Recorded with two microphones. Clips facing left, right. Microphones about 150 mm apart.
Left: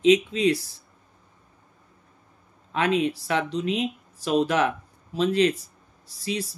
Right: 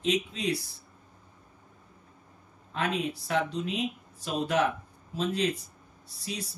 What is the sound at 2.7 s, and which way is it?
Speech, 85° left.